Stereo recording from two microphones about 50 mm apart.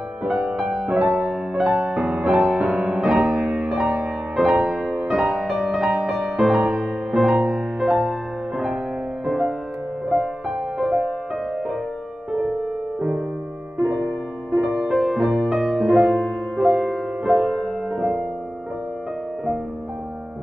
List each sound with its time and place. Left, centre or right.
0.2 s music: centre
7.3 s music: centre
7.8 s music: centre
13.8 s music: centre
14.9 s music: centre